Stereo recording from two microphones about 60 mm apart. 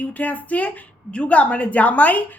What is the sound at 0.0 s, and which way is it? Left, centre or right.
A woman's voice, left.